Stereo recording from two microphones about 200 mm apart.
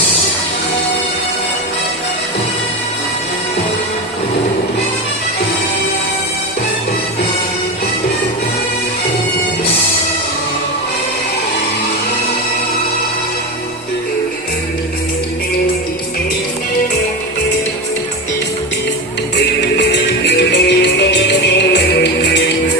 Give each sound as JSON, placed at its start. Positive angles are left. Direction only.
{"t": 19.4, "sound": "music", "side_deg": 55}